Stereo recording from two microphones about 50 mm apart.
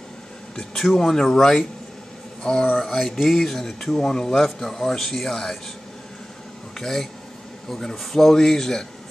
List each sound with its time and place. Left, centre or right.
0.6 s speech: centre
6.8 s speech: centre